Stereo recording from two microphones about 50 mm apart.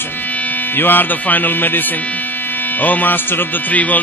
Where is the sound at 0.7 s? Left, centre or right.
Left.